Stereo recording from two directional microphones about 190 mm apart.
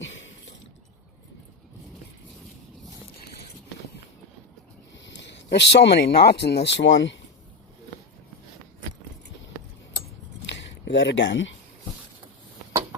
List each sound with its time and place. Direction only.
5.0 s speech: 70° left (ahead or behind)
6.7 s speech: 70° left (ahead or behind)
10.5 s a sound: 65° left (ahead or behind)